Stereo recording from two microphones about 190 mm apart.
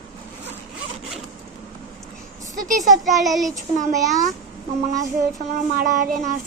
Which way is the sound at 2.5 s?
45° right (ahead or behind).